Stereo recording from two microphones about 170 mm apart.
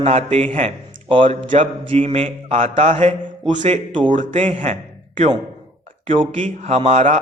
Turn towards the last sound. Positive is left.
turn(degrees=-40)  # may be behind; listen again after turning